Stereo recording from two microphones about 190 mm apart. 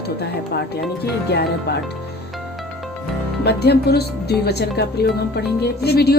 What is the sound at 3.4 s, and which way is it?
Speech, 60° left (ahead or behind).